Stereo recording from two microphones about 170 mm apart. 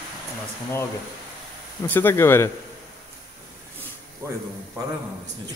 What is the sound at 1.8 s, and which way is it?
Speech, 10° left (ahead or behind).